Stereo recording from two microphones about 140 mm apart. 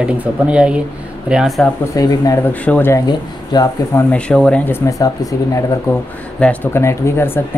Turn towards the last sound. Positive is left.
turn(degrees=15)  # may be behind; listen again after turning